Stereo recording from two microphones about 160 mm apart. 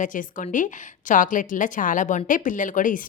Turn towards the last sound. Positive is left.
turn(degrees=55)  # may be behind; listen again after turning